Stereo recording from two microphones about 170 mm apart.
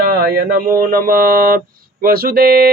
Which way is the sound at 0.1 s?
65° right (ahead or behind).